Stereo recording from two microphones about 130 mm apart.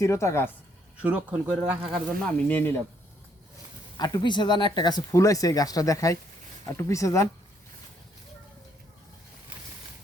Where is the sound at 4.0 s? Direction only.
35° left (ahead or behind).